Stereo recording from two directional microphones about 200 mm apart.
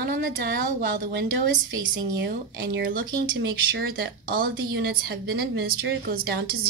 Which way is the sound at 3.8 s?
50° right (ahead or behind).